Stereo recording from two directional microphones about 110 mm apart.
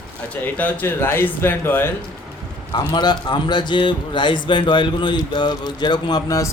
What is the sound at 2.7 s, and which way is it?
A man's voice, 40° left (ahead or behind).